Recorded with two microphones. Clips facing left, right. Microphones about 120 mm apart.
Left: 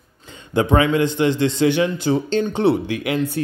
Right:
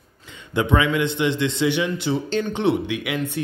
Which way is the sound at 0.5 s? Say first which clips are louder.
Left 3 dB; 35° left (ahead or behind).